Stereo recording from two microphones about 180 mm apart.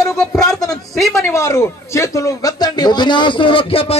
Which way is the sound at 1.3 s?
15° left (ahead or behind).